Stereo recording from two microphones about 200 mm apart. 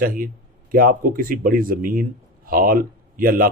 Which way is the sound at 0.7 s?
45° right (ahead or behind).